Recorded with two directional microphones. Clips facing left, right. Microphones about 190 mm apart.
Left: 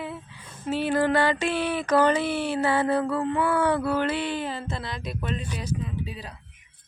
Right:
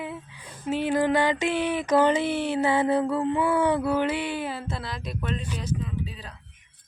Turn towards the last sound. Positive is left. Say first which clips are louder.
# even
turn(degrees=10)  # may be behind; listen again after turning